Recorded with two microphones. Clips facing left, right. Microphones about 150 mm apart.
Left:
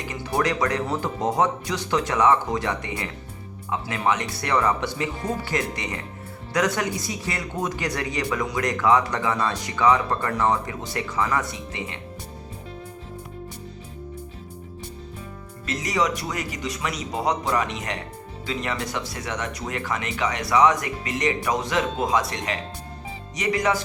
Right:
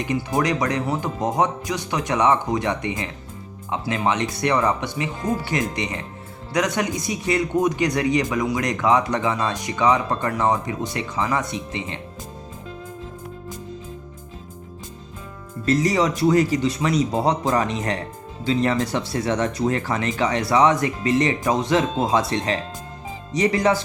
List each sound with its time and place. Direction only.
0.0 s speech: 15° right (ahead or behind)
15.6 s speech: 35° right (ahead or behind)